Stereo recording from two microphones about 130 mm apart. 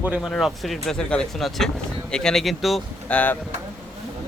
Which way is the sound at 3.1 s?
10° left (ahead or behind).